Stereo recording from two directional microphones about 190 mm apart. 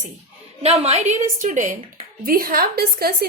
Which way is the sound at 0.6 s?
35° right (ahead or behind).